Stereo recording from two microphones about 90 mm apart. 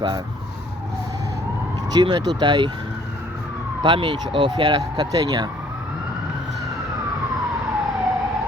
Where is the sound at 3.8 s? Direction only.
60° right (ahead or behind).